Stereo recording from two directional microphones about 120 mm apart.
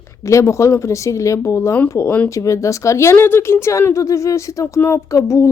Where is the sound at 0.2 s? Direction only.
25° left (ahead or behind).